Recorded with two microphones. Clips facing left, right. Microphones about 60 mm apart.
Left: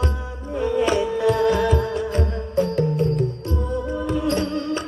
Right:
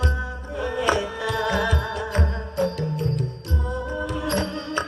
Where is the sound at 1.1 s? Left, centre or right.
Left.